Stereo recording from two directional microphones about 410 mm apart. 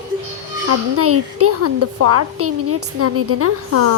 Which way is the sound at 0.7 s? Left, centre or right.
Right.